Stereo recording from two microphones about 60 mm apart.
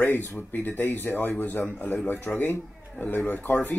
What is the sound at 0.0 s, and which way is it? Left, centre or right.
Speech, left.